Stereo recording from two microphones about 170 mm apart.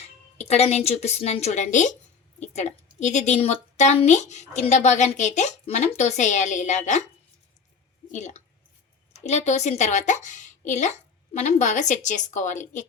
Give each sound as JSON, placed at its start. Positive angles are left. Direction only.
{"t": 0.3, "sound": "a woman's voice", "side_deg": 35}
{"t": 8.1, "sound": "a woman's voice", "side_deg": 45}